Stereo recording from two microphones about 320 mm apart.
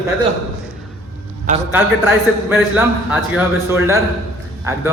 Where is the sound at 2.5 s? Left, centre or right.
Centre.